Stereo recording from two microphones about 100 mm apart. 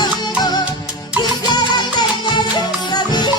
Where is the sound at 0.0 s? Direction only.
45° left (ahead or behind).